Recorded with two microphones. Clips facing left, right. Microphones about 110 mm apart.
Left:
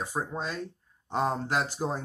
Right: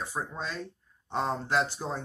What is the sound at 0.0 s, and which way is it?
Speech, 15° left (ahead or behind).